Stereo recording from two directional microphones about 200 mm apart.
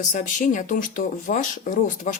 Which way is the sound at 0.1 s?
40° left (ahead or behind).